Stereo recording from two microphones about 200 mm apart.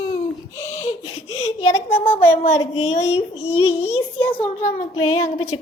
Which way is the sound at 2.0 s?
25° left (ahead or behind).